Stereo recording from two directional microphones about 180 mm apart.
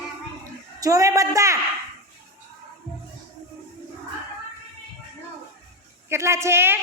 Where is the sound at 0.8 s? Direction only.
20° right (ahead or behind).